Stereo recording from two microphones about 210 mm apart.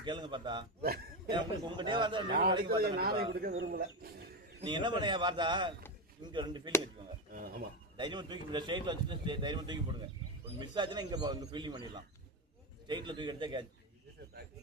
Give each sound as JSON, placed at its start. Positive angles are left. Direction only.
{"t": 0.0, "sound": "a man's voice", "side_deg": -20}
{"t": 0.8, "sound": "speech", "side_deg": -45}
{"t": 1.3, "sound": "a man's voice", "side_deg": -20}
{"t": 2.6, "sound": "speech", "side_deg": -45}
{"t": 4.6, "sound": "a man's voice", "side_deg": -20}
{"t": 7.3, "sound": "speech", "side_deg": -45}
{"t": 7.9, "sound": "a man's voice", "side_deg": -20}